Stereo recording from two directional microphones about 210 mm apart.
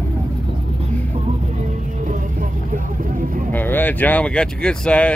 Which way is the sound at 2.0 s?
40° right (ahead or behind).